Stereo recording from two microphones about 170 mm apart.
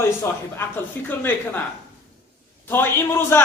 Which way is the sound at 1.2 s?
10° left (ahead or behind).